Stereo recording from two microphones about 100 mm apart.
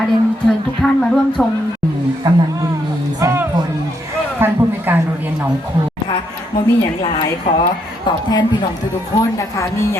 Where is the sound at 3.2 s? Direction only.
30° right (ahead or behind).